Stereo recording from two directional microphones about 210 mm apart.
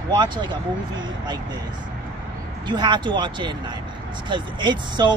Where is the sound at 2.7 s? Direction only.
20° right (ahead or behind).